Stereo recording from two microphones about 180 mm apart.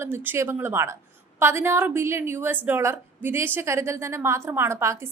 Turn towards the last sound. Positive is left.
turn(degrees=-15)  # may be behind; listen again after turning